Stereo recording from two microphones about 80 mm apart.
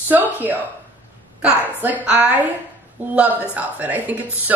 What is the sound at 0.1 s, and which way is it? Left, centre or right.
A woman's voice, right.